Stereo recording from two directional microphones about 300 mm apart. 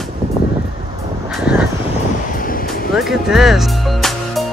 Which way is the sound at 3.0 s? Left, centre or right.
Centre.